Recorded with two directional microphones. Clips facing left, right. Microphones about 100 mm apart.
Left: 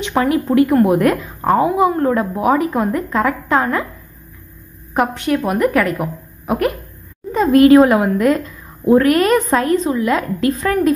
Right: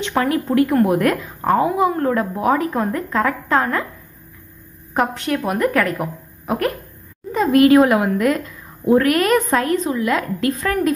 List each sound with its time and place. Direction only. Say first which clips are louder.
0.0 s a woman's voice: left 3 dB; 15° left (ahead or behind)
4.9 s a woman's voice: left 3 dB; 5° left (ahead or behind)
7.3 s a woman's voice: left 3 dB; 30° left (ahead or behind)